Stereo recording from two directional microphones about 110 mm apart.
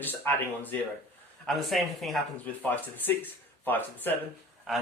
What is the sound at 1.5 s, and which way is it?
Speech, centre (ahead or behind).